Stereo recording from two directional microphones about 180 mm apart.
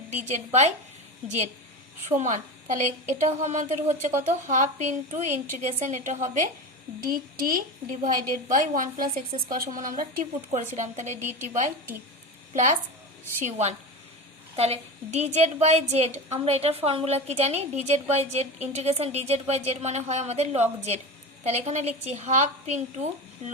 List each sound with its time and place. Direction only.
0.3 s a woman's voice: 40° right (ahead or behind)
2.0 s a woman's voice: 45° right (ahead or behind)
11.2 s a woman's voice: 10° right (ahead or behind)
13.4 s a woman's voice: 40° right (ahead or behind)